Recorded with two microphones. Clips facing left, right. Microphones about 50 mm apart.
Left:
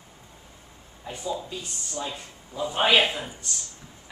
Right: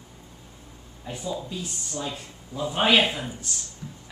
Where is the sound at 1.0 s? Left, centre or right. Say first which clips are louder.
Even; centre.